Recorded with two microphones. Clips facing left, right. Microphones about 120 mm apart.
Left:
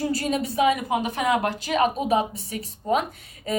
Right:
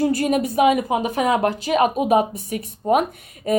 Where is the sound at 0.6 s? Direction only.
30° right (ahead or behind).